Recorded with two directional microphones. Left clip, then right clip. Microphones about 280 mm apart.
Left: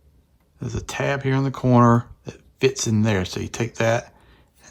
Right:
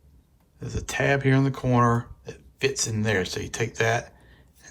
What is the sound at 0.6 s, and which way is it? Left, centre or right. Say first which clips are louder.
Speech: even; centre.